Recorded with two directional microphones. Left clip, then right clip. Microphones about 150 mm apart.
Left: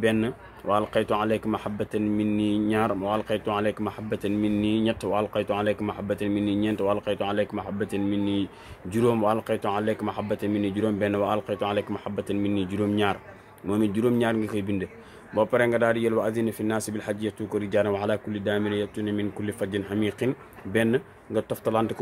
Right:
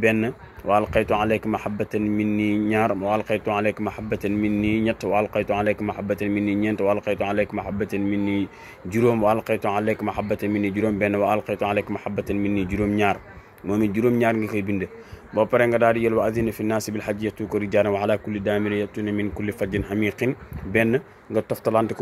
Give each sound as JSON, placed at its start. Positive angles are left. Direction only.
{"t": 0.0, "sound": "speech", "side_deg": -15}
{"t": 2.3, "sound": "speech", "side_deg": -65}
{"t": 2.7, "sound": "speech", "side_deg": -15}
{"t": 14.2, "sound": "speech", "side_deg": -15}